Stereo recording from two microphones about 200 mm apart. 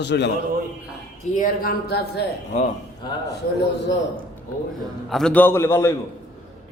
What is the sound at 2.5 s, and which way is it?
Speech, 35° left (ahead or behind).